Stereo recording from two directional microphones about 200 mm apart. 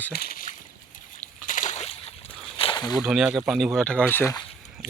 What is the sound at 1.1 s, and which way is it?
Slosh, 40° left (ahead or behind).